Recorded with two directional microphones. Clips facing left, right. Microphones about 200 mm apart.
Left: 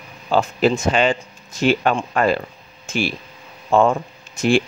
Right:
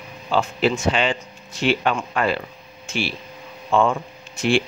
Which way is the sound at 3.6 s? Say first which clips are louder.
Left 3 dB; 40° left (ahead or behind).